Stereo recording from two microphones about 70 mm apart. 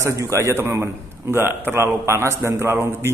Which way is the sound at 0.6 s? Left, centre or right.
Right.